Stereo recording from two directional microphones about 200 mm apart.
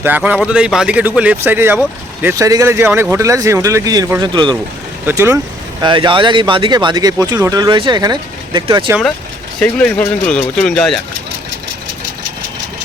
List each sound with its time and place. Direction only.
0.0 s speech: 10° right (ahead or behind)
9.6 s speech: 5° left (ahead or behind)